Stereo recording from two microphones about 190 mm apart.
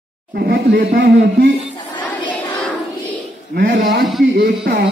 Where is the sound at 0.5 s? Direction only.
55° right (ahead or behind).